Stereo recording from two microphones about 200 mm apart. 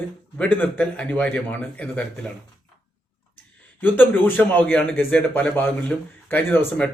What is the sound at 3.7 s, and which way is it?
A man's voice, 10° left (ahead or behind).